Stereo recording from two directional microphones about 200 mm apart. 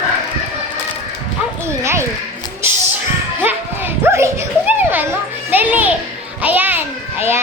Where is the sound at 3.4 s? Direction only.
10° right (ahead or behind).